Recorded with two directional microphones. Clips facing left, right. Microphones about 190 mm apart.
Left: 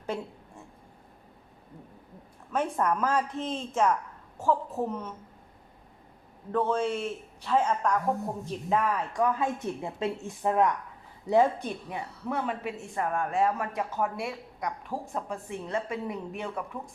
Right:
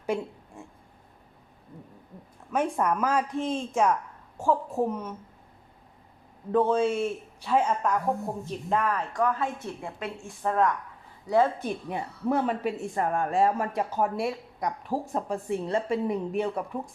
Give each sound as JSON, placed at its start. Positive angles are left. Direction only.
{"t": 2.5, "sound": "a man's voice", "side_deg": -10}
{"t": 6.5, "sound": "a man's voice", "side_deg": -15}
{"t": 8.7, "sound": "a woman's voice", "side_deg": 5}
{"t": 11.9, "sound": "speech", "side_deg": -35}